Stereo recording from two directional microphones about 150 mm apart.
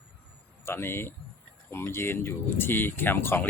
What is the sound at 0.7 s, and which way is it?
Speech, 15° left (ahead or behind).